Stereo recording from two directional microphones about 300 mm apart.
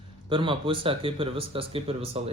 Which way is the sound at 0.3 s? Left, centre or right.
Centre.